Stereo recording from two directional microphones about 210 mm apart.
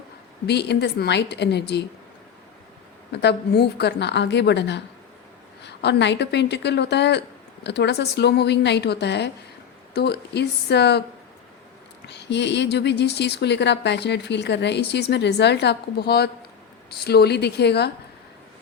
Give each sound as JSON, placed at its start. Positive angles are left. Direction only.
{"t": 0.4, "sound": "speech", "side_deg": 55}
{"t": 3.1, "sound": "a woman's voice", "side_deg": 50}
{"t": 12.0, "sound": "speech", "side_deg": 55}